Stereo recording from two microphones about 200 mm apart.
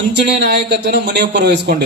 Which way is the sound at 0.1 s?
55° right (ahead or behind).